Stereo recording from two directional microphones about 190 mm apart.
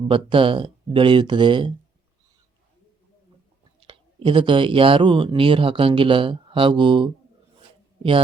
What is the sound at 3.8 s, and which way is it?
Speech, 25° right (ahead or behind).